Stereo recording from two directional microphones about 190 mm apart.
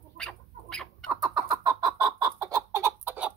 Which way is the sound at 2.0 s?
20° right (ahead or behind).